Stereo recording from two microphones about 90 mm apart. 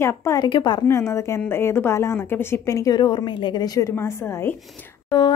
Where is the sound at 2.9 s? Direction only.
60° left (ahead or behind).